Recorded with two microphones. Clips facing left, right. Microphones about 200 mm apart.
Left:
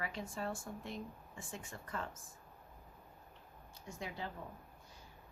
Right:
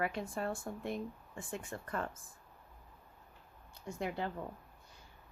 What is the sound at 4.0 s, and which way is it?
Speech, 55° right (ahead or behind).